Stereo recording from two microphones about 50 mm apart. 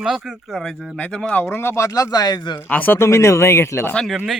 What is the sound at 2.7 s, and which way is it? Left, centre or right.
Speech, left.